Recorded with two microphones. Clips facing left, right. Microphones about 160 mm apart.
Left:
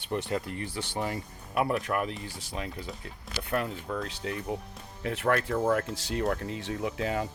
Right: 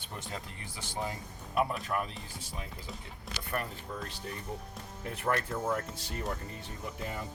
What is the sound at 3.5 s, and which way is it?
Speech, 90° left.